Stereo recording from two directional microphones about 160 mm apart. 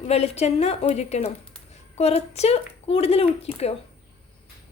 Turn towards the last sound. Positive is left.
turn(degrees=40)  # may be behind; listen again after turning